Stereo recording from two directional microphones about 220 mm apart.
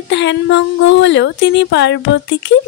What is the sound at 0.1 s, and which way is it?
Child singing, 55° left (ahead or behind).